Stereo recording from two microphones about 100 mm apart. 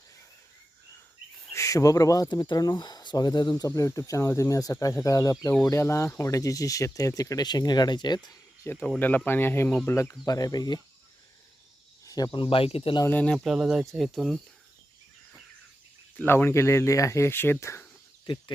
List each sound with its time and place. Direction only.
1.5 s speech: 35° left (ahead or behind)
3.8 s speech: 30° left (ahead or behind)
8.7 s speech: 25° left (ahead or behind); by 10.8 s 40° left (ahead or behind)
12.0 s speech: 40° left (ahead or behind); by 12.9 s 70° left (ahead or behind)
13.1 s speech: 15° left (ahead or behind)
13.3 s speech: 5° right (ahead or behind)
16.1 s speech: 20° left (ahead or behind)